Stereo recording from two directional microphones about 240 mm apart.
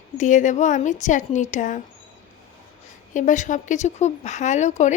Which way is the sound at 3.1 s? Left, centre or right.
Left.